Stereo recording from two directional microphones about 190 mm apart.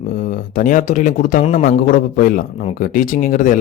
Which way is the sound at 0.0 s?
50° left (ahead or behind).